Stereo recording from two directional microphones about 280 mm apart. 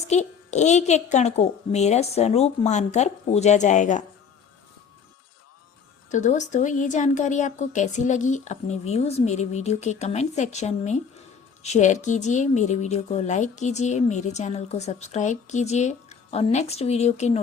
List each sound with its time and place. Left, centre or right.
0.1 s a woman's voice: left
6.1 s a woman's voice: left